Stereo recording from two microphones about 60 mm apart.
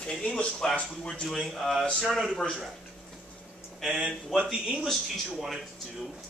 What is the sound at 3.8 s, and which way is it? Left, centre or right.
Speech, centre.